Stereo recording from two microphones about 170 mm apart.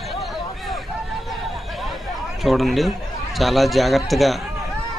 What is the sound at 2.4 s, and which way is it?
A man's voice, centre (ahead or behind).